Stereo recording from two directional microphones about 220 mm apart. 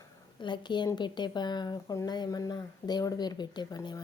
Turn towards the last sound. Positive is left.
turn(degrees=20)  # may be behind; listen again after turning